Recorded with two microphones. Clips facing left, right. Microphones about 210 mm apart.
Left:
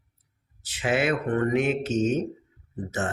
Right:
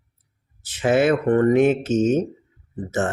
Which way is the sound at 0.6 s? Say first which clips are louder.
Right 7 dB; 45° right (ahead or behind).